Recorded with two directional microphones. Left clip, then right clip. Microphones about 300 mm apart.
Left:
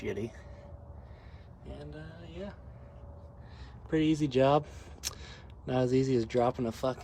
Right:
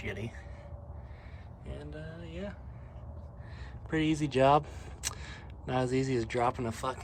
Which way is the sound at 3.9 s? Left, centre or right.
Centre.